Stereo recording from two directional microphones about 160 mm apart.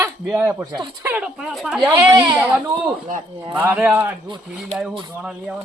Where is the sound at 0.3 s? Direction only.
15° right (ahead or behind).